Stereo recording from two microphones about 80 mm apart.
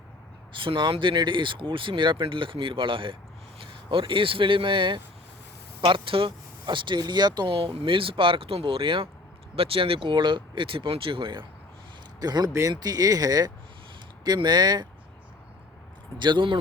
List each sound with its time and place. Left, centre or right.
0.5 s speech: right
7.0 s speech: right
12.2 s speech: right
14.3 s speech: right
16.1 s speech: right